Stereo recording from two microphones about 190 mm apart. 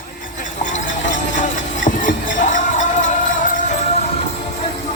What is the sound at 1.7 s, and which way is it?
Music, 45° left (ahead or behind).